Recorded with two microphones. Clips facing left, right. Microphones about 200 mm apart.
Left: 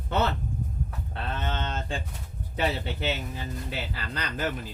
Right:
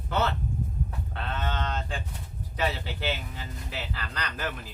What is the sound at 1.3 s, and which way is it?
Speech, 25° left (ahead or behind).